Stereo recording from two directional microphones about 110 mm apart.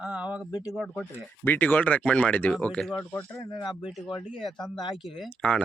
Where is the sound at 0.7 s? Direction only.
Centre (ahead or behind).